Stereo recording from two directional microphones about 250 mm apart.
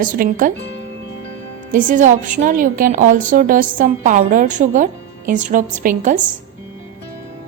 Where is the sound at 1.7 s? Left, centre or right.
Right.